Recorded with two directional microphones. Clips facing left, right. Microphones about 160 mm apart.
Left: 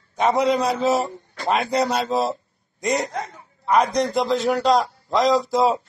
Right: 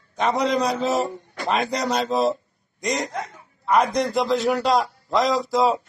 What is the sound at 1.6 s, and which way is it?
Speech, 30° left (ahead or behind).